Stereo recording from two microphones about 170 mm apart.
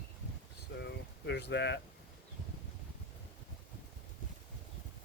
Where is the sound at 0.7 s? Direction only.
85° left.